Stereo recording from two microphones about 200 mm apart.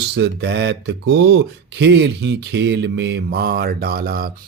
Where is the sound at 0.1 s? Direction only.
60° right (ahead or behind).